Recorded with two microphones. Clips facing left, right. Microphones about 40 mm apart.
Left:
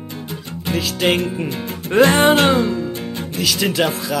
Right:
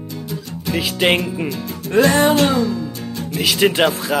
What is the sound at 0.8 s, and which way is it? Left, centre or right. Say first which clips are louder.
Speech: right 1 dB; right.